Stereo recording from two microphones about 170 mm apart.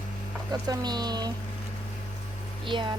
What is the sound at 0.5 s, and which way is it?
Speech, 25° right (ahead or behind).